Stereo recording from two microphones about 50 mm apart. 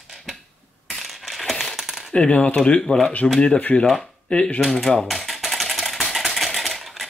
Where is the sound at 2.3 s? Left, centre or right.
Left.